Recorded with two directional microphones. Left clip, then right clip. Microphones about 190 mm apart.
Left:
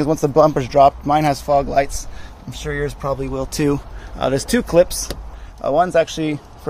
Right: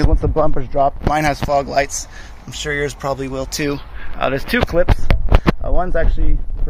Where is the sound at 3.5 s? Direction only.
30° left (ahead or behind).